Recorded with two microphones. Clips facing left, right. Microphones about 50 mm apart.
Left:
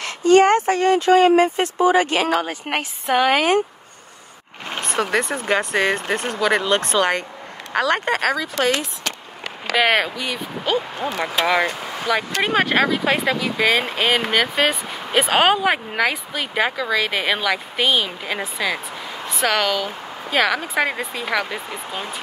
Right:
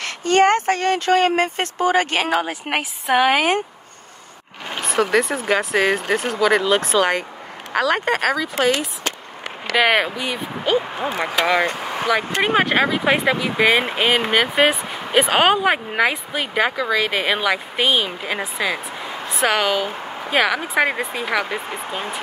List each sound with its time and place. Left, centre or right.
0.0 s speech: right
2.3 s a woman's voice: centre
4.8 s a woman's voice: centre
11.1 s speech: right
11.6 s vehicle: right
12.8 s speech: right
15.1 s speech: centre
16.5 s a woman's voice: centre
19.7 s a sound: right
20.3 s a woman's voice: centre
21.0 s speech: right